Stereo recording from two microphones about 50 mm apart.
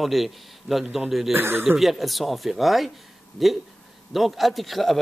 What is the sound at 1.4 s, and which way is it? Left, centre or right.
Speech, right.